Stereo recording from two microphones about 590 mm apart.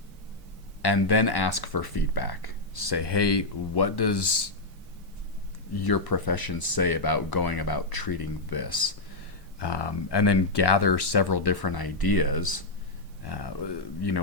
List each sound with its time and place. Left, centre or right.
0.8 s speech: left
5.8 s speech: left